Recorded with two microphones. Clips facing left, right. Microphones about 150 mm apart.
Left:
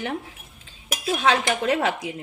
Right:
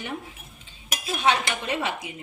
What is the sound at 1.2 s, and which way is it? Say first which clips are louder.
Speech: left 2 dB; 90° left.